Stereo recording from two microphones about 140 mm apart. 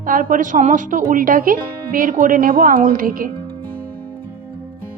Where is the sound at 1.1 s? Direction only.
80° right.